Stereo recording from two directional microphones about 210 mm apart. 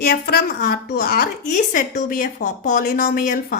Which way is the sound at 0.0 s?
45° left (ahead or behind).